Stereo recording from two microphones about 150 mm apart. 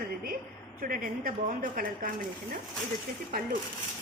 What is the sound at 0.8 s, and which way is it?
A woman's voice, 70° right (ahead or behind).